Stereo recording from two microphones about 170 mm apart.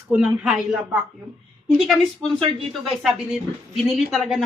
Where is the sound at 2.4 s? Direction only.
30° right (ahead or behind).